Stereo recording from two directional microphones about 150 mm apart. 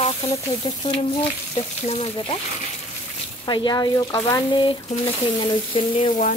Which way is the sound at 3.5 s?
30° left (ahead or behind).